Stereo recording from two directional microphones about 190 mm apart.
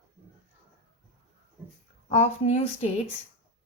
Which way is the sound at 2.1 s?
35° left (ahead or behind).